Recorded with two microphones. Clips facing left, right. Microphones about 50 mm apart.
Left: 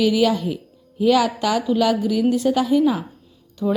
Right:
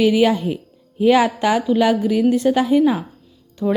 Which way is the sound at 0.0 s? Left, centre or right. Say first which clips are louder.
Right 3 dB; right.